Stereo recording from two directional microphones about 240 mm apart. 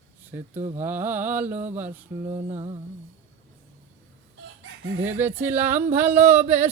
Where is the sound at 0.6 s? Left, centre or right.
Right.